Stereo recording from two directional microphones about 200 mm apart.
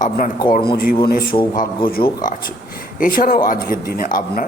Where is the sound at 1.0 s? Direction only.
45° left (ahead or behind).